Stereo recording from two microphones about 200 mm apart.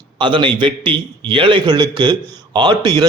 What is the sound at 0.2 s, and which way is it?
Speech, 25° right (ahead or behind).